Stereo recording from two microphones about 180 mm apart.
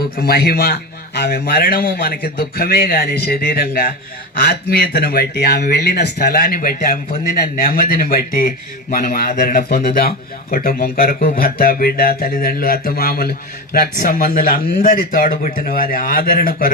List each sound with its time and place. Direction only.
0.2 s speech: 55° left (ahead or behind)